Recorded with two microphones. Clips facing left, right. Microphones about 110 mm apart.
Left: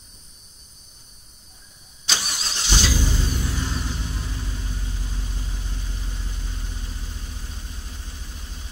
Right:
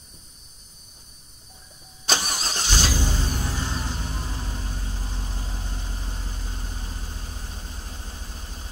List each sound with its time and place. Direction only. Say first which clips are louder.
2.0 s vehicle: right 4 dB; 45° right (ahead or behind)